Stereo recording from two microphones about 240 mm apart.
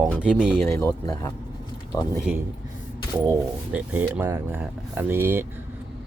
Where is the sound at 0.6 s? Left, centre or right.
Centre.